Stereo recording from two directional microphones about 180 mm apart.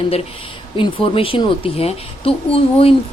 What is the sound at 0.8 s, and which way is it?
Speech, 30° left (ahead or behind).